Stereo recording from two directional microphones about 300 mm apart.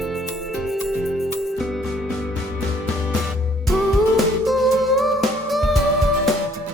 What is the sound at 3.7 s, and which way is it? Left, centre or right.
Music, centre.